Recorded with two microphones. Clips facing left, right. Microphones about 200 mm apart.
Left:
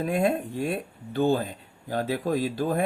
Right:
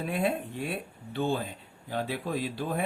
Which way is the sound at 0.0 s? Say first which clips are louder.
Left 5 dB; 45° left (ahead or behind).